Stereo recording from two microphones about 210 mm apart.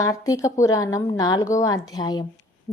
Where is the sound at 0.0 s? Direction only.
15° left (ahead or behind).